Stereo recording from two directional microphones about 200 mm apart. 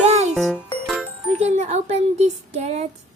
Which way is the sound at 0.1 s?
35° right (ahead or behind).